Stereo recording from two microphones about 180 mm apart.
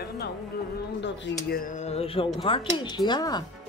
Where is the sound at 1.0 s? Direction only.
60° left (ahead or behind).